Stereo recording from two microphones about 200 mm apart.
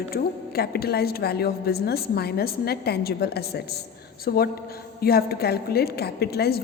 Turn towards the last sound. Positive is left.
turn(degrees=50)  # may be behind; listen again after turning